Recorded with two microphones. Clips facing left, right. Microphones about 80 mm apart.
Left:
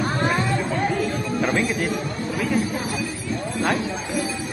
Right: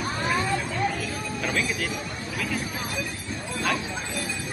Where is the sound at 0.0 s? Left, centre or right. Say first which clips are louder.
Left 4 dB; left.